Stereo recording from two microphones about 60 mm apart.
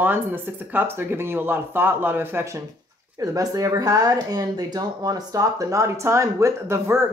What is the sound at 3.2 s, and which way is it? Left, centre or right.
Speech, right.